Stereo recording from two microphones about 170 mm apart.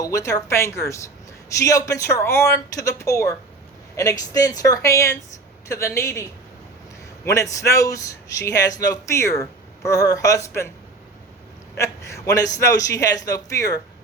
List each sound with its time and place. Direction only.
0.0 s a man's voice: 20° left (ahead or behind)
7.3 s a man's voice: 20° left (ahead or behind)
11.8 s a man's voice: 20° left (ahead or behind)